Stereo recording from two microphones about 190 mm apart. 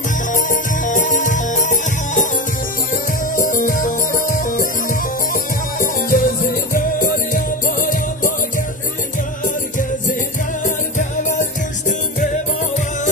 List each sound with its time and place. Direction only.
0.3 s music: 45° left (ahead or behind)